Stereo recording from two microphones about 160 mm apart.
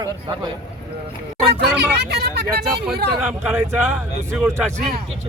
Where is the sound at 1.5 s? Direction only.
90° right.